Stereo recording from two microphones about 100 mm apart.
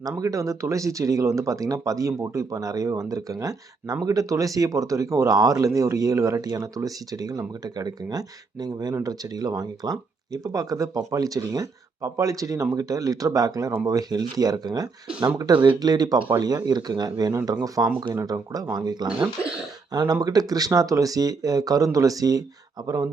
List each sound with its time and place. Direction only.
0.2 s speech: 35° right (ahead or behind)